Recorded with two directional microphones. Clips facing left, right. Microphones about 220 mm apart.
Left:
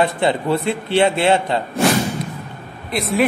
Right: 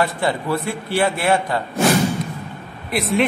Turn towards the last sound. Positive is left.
turn(degrees=0)  # may be behind; listen again after turning